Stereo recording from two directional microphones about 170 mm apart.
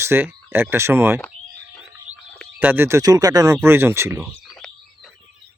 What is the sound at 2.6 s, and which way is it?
Speech, 10° right (ahead or behind).